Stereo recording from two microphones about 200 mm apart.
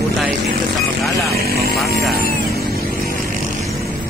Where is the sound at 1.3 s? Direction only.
50° right (ahead or behind).